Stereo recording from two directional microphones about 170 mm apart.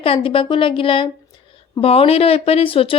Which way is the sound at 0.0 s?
30° left (ahead or behind).